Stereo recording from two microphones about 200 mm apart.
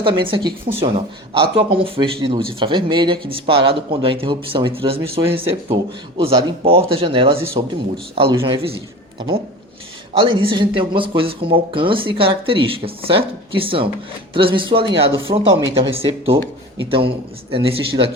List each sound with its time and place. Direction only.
0.0 s speech: 25° right (ahead or behind)
10.1 s speech: 25° right (ahead or behind)
17.5 s speech: 25° right (ahead or behind)